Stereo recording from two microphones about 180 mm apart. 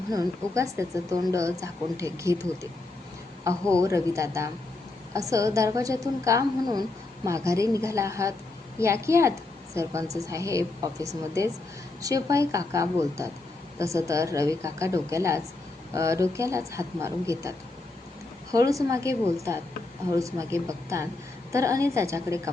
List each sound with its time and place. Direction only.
0.5 s a woman's voice: 15° right (ahead or behind)
3.7 s a woman's voice: 15° right (ahead or behind)
18.5 s a woman's voice: 20° right (ahead or behind)